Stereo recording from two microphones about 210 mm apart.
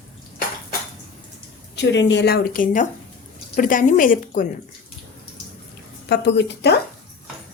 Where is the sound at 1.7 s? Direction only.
55° left (ahead or behind); by 4.4 s 40° left (ahead or behind).